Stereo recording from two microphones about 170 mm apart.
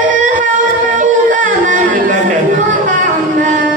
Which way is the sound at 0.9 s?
50° right (ahead or behind).